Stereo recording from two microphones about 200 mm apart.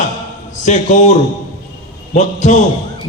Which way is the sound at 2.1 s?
40° left (ahead or behind).